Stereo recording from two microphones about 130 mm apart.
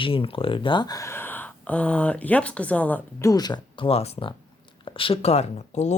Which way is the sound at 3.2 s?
30° left (ahead or behind).